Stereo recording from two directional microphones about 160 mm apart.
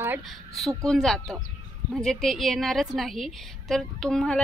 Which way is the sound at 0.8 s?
Centre (ahead or behind).